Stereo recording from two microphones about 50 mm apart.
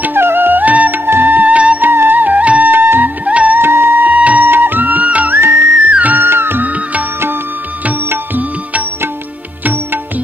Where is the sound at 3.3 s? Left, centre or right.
Right.